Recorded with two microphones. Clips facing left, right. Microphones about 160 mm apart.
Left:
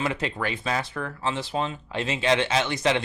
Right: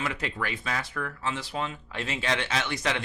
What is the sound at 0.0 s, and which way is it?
Speech, 25° left (ahead or behind).